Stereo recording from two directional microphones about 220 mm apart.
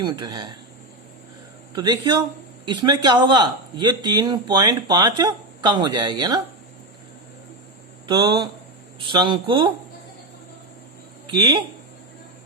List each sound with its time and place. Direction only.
0.0 s speech: 20° right (ahead or behind)
1.7 s speech: 20° right (ahead or behind)
8.0 s speech: 20° right (ahead or behind)
11.3 s speech: 20° right (ahead or behind)